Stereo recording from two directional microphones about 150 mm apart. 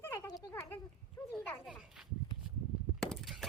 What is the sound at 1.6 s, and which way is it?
Speech, 5° right (ahead or behind).